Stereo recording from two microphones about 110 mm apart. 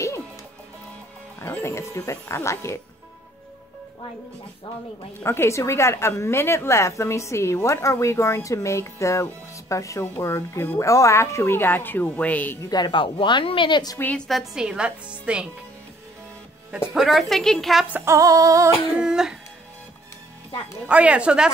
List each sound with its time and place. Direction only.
1.4 s a woman's voice: 25° left (ahead or behind)
5.2 s a woman's voice: 25° left (ahead or behind)
12.6 s speech: 40° left (ahead or behind)
13.9 s a woman's voice: 10° left (ahead or behind); by 15.4 s 10° right (ahead or behind)
16.9 s a woman's voice: centre (ahead or behind)
18.0 s female singing: 30° right (ahead or behind)
18.9 s speech: 5° right (ahead or behind)
20.8 s speech: 10° right (ahead or behind)